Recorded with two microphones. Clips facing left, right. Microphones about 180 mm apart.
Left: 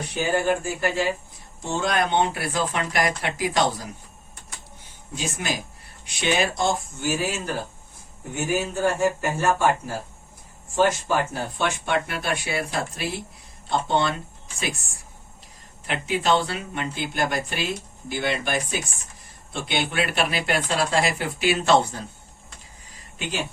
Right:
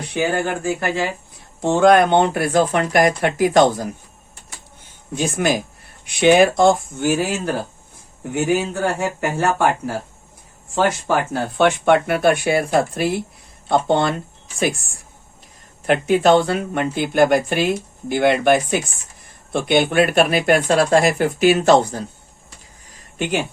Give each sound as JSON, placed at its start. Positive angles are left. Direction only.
{"t": 0.2, "sound": "speech", "side_deg": -70}
{"t": 1.6, "sound": "speech", "side_deg": -60}
{"t": 5.1, "sound": "speech", "side_deg": -55}
{"t": 15.9, "sound": "speech", "side_deg": -50}
{"t": 23.1, "sound": "speech", "side_deg": -55}